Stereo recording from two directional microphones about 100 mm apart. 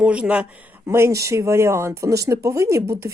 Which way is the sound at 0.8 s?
25° right (ahead or behind).